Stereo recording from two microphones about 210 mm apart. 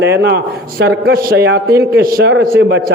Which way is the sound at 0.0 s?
50° right (ahead or behind).